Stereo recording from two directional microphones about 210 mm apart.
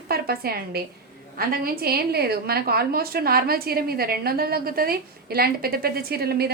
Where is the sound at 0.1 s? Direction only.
45° right (ahead or behind).